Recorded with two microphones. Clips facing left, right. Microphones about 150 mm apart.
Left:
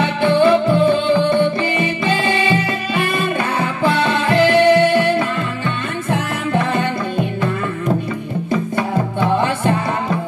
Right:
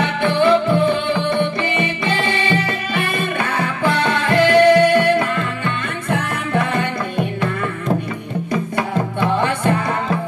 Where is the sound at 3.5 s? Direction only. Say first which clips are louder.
Left 1 dB; 30° left (ahead or behind).